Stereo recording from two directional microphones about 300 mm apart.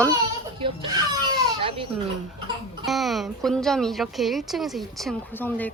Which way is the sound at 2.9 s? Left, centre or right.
Centre.